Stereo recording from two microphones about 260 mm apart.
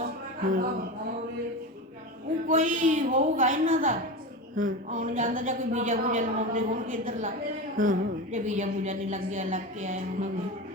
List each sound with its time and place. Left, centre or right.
0.4 s a woman's voice: right
2.5 s a woman's voice: right